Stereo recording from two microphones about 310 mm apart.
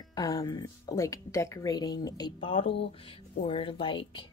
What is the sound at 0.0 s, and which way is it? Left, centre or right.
A woman's voice, centre.